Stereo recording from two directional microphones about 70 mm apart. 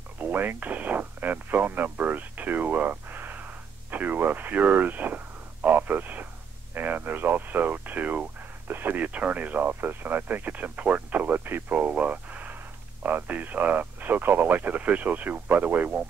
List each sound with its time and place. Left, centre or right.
0.2 s speech: right